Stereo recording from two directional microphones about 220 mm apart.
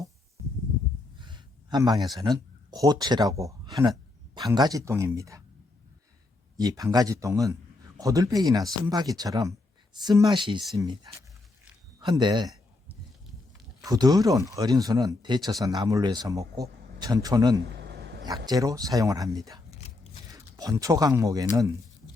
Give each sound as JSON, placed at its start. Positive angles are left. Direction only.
{"t": 1.2, "sound": "a man's voice", "side_deg": -20}
{"t": 6.6, "sound": "a man's voice", "side_deg": -15}
{"t": 13.8, "sound": "a man's voice", "side_deg": -15}
{"t": 17.7, "sound": "a sound", "side_deg": -50}
{"t": 18.3, "sound": "a man's voice", "side_deg": -15}